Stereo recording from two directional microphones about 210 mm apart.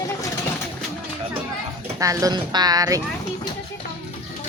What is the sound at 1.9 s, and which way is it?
Speech, 15° right (ahead or behind).